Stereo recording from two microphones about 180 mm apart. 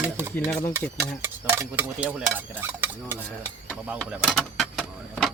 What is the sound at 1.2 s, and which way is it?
Dishes, 10° right (ahead or behind).